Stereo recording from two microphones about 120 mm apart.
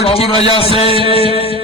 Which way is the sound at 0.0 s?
55° left (ahead or behind).